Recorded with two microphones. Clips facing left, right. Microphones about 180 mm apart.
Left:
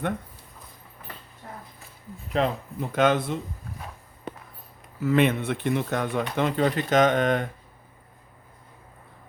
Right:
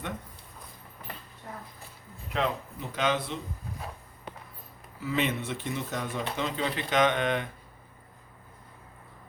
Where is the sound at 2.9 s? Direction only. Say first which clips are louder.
Left 7 dB; 50° left (ahead or behind).